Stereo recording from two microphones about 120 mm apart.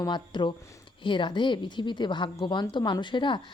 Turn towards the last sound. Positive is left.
turn(degrees=40)  # may be behind; listen again after turning